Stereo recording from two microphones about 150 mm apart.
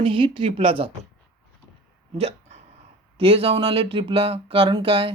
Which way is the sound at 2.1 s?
45° right (ahead or behind).